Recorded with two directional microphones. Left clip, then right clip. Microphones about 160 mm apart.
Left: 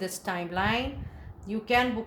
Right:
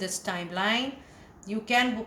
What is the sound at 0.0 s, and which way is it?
A woman's voice, 45° left (ahead or behind).